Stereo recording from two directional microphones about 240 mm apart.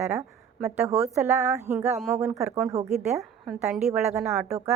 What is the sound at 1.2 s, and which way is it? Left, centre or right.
A woman's voice, centre.